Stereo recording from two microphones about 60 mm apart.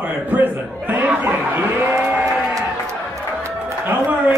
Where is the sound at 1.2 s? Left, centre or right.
Right.